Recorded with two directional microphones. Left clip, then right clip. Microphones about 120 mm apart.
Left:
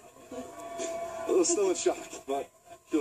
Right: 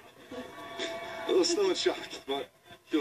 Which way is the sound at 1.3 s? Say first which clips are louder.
Even; 25° right (ahead or behind).